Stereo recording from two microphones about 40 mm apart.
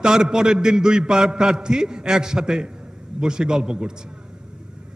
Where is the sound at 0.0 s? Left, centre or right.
Centre.